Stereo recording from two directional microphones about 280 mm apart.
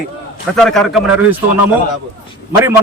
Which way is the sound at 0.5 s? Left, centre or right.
Centre.